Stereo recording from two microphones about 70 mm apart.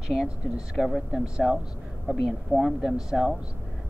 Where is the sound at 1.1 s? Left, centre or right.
Centre.